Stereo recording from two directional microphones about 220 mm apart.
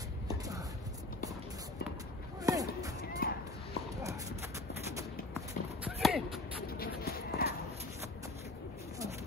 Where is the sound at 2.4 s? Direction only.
15° right (ahead or behind).